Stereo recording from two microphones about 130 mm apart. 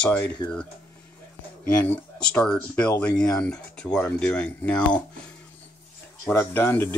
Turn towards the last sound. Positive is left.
turn(degrees=15)  # may be behind; listen again after turning